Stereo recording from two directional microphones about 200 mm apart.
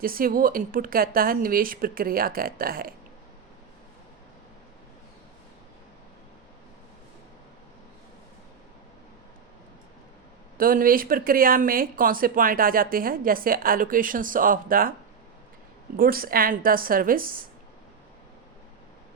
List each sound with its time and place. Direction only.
0.0 s speech: 45° right (ahead or behind)
10.6 s speech: 45° right (ahead or behind)
16.0 s speech: 45° right (ahead or behind)